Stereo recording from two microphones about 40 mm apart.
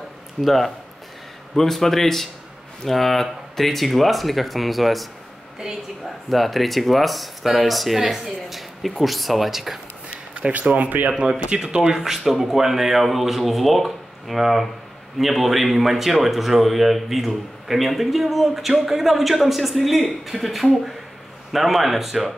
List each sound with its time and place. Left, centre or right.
0.4 s a man's voice: centre
6.3 s a man's voice: centre
10.5 s speech: right
11.1 s speech: right
12.0 s a man's voice: centre